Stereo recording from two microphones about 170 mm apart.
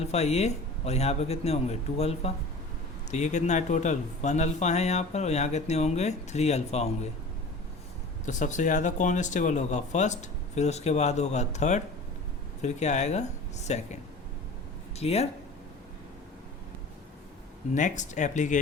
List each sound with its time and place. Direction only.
0.0 s a man's voice: 40° left (ahead or behind)
8.2 s a man's voice: 45° left (ahead or behind)
17.7 s speech: 45° left (ahead or behind)